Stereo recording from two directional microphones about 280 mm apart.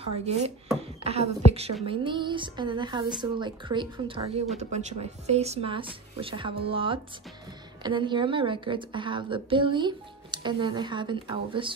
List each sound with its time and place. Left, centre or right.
0.2 s a woman's voice: right